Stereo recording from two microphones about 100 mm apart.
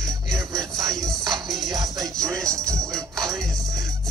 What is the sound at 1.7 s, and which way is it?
Music, 35° right (ahead or behind).